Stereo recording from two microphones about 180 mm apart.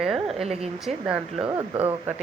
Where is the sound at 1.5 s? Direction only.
30° right (ahead or behind).